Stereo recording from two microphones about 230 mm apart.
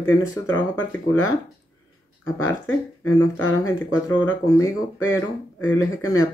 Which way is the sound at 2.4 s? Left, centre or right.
Left.